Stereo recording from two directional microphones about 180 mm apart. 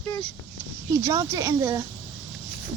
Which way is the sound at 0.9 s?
15° right (ahead or behind).